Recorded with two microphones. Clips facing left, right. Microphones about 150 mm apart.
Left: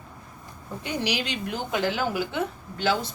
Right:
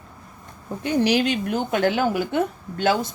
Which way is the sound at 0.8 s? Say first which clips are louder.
Right 9 dB; 50° right (ahead or behind).